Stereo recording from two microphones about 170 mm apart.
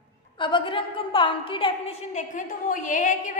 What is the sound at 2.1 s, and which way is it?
A woman's voice, 50° left (ahead or behind).